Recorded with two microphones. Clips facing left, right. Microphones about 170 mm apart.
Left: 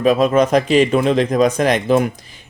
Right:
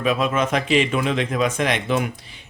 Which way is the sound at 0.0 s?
40° left (ahead or behind).